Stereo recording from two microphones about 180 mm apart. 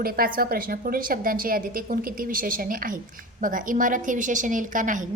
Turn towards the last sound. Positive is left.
turn(degrees=-45)  # may be behind; listen again after turning